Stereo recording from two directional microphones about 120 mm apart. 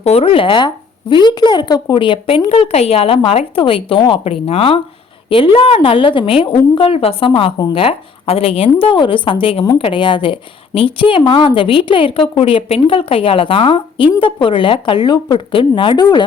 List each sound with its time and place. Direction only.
0.0 s a woman's voice: 55° left (ahead or behind); by 16.2 s 35° left (ahead or behind)